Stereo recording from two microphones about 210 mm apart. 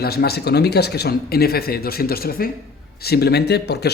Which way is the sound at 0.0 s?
50° left (ahead or behind).